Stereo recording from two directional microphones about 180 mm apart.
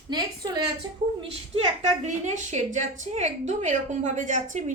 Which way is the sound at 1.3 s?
35° right (ahead or behind).